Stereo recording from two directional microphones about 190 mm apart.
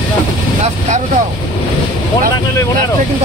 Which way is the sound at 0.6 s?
40° right (ahead or behind).